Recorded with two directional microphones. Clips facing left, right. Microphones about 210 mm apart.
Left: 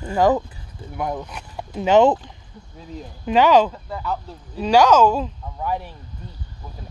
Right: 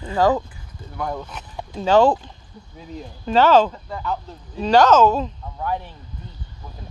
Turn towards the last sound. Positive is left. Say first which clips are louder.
# even
turn(degrees=10)  # may be behind; listen again after turning